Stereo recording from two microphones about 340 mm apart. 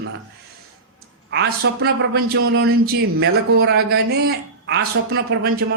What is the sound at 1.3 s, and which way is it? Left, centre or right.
A man's voice, right.